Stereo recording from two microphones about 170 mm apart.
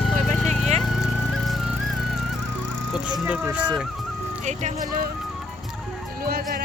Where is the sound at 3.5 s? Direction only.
5° right (ahead or behind).